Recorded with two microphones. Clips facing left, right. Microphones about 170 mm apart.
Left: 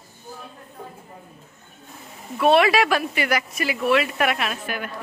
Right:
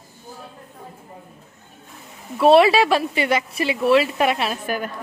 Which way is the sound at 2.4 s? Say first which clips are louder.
Right 4 dB; 30° right (ahead or behind).